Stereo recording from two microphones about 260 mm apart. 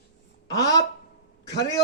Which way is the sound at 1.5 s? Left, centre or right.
Left.